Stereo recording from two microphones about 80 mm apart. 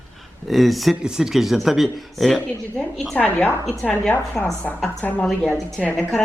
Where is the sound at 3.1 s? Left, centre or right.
Left.